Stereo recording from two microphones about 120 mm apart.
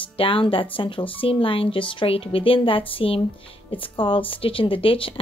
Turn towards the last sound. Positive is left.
turn(degrees=45)  # may be behind; listen again after turning